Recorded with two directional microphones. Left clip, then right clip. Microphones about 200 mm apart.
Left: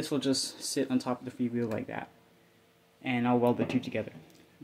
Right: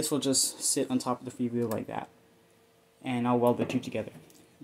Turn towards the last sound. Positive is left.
turn(degrees=-5)  # may be behind; listen again after turning